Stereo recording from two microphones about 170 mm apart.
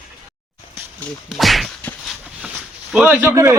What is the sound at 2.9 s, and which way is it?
Speech, 10° right (ahead or behind).